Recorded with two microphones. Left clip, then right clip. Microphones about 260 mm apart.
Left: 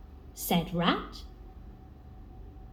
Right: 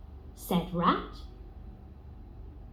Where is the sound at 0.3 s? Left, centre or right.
Left.